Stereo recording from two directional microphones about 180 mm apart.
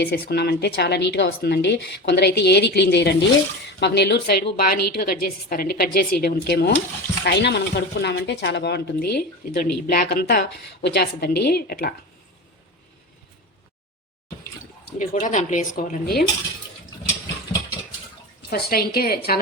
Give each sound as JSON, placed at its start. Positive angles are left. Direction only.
{"t": 0.0, "sound": "a woman's voice", "side_deg": 65}
{"t": 14.9, "sound": "speech", "side_deg": 45}
{"t": 18.5, "sound": "speech", "side_deg": 60}